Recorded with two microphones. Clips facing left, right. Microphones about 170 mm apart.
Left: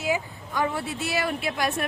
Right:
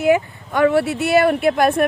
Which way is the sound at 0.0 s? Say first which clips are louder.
Right 11 dB; 65° right (ahead or behind).